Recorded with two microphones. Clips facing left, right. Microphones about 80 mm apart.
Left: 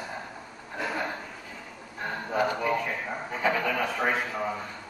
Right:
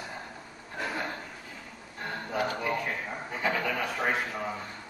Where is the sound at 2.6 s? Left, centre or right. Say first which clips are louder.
Left 3 dB; centre.